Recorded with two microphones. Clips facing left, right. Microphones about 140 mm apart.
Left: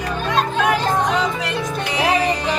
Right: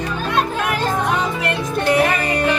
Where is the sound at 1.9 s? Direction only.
55° right (ahead or behind).